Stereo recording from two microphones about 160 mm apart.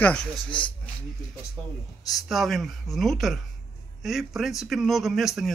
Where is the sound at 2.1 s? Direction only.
Centre (ahead or behind).